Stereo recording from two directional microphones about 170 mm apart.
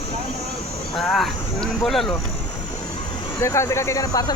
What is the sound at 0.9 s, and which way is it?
Speech, centre (ahead or behind).